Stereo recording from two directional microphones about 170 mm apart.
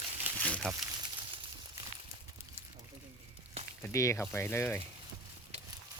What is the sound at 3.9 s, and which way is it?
Speech, 20° left (ahead or behind).